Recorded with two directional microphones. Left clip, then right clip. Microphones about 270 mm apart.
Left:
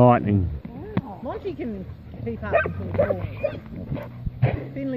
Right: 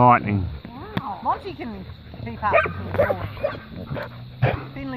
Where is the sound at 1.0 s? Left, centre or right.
Right.